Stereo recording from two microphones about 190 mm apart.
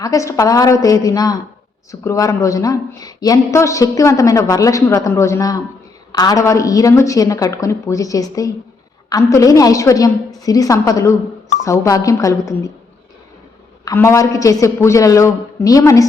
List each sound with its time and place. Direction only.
0.0 s a woman's voice: 15° left (ahead or behind)
13.8 s speech: 15° left (ahead or behind)